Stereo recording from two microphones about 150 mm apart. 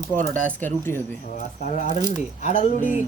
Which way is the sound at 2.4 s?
50° left (ahead or behind).